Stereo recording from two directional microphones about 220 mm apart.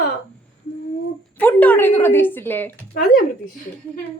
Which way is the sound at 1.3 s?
5° left (ahead or behind).